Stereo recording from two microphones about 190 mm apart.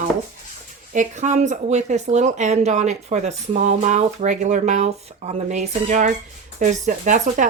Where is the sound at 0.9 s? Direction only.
40° right (ahead or behind).